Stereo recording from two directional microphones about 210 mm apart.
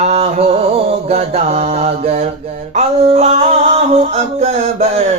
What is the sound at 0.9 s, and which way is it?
Mantra, 30° right (ahead or behind).